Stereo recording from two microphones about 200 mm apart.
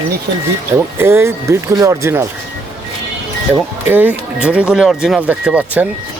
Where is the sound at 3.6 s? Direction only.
10° right (ahead or behind).